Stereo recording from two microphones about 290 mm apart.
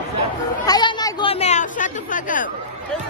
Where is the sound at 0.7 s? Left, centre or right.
Centre.